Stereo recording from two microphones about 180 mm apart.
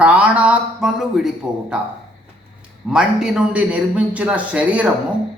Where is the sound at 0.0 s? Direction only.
5° right (ahead or behind).